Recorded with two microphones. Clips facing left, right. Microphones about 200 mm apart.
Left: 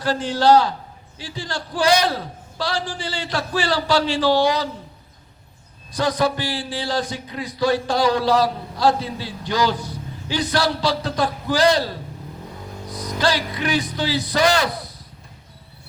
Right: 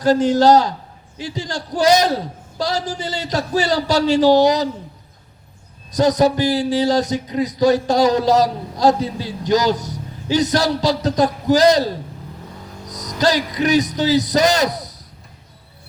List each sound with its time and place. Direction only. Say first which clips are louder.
0.0 s a man's voice: right 6 dB; 40° right (ahead or behind)
5.9 s a man's voice: right 6 dB; 40° right (ahead or behind)
12.9 s a man's voice: right 4 dB; 40° right (ahead or behind)